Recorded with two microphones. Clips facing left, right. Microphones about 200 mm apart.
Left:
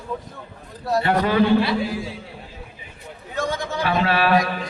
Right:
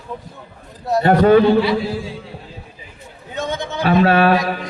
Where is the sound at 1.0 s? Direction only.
45° right (ahead or behind).